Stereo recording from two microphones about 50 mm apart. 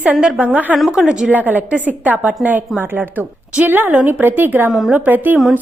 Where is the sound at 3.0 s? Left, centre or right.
Right.